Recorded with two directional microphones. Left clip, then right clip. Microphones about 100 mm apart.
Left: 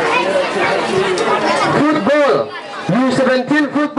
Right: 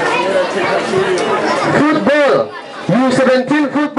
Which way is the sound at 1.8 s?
25° right (ahead or behind).